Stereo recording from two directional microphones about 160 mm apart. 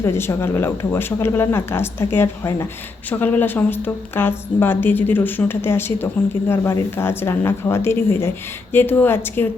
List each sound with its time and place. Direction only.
0.0 s a woman's voice: 15° left (ahead or behind)